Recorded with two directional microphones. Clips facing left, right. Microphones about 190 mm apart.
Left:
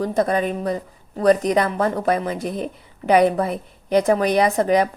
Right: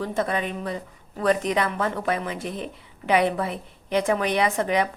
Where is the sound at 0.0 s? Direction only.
40° left (ahead or behind).